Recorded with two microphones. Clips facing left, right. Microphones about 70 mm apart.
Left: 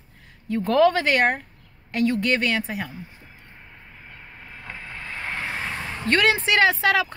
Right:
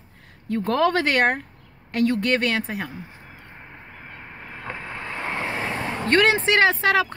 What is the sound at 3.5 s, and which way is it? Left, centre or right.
Vehicle, right.